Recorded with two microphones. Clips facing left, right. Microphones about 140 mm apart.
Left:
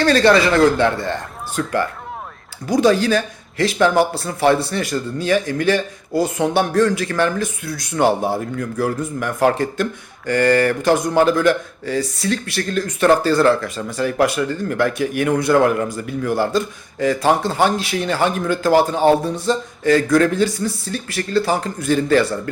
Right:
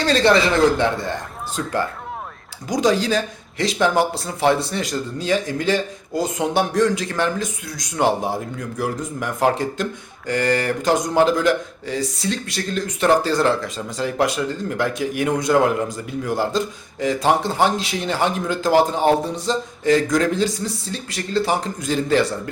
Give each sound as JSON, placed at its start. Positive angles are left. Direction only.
{"t": 0.0, "sound": "speech", "side_deg": -20}